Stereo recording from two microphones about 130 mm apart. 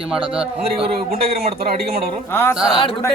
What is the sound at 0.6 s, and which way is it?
Speech, 50° right (ahead or behind).